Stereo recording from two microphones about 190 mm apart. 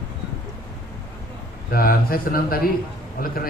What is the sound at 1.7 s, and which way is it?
A man's voice, 50° left (ahead or behind).